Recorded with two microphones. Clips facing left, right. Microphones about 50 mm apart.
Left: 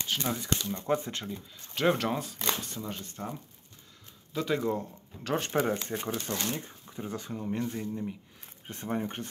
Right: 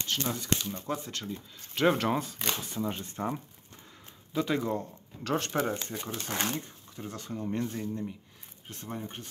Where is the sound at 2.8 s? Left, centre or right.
Right.